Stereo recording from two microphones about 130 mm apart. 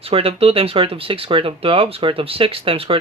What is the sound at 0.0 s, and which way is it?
Speech, 45° right (ahead or behind).